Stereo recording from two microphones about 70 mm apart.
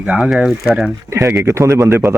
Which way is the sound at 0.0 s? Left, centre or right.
Centre.